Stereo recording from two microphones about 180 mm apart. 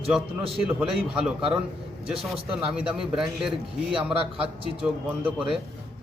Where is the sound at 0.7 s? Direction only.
5° right (ahead or behind).